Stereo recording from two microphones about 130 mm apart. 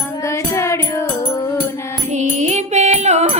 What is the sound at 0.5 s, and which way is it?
Music, 20° left (ahead or behind).